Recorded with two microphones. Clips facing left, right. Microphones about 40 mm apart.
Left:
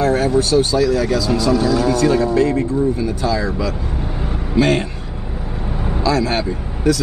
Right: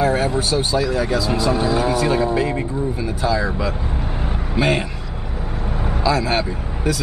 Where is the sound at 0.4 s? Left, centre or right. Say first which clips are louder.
Left 5 dB; centre.